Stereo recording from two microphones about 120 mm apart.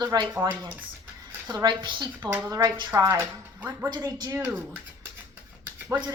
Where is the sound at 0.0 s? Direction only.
35° right (ahead or behind).